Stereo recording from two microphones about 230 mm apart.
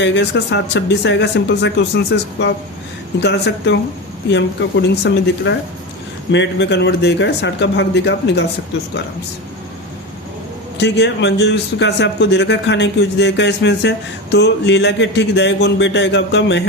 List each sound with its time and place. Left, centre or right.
0.0 s a man's voice: left
10.8 s a man's voice: left